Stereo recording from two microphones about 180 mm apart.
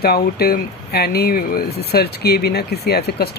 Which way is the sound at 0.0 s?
60° left (ahead or behind).